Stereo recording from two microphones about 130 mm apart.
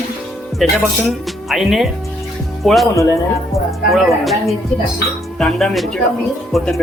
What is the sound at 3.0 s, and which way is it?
Speech, 25° left (ahead or behind).